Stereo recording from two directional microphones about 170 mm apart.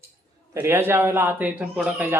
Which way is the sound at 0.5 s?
15° right (ahead or behind).